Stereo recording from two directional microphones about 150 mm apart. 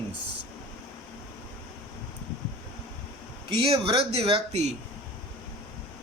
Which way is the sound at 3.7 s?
40° right (ahead or behind).